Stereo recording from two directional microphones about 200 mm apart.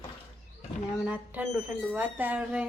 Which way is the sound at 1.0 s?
5° right (ahead or behind).